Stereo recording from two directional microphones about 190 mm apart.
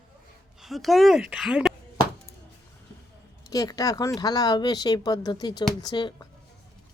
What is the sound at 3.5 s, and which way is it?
Speech, 20° left (ahead or behind).